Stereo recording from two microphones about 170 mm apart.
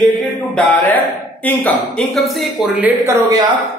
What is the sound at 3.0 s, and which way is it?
Speech, 20° right (ahead or behind).